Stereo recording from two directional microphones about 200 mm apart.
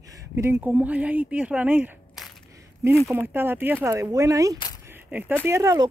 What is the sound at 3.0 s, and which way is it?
Speech, 10° right (ahead or behind).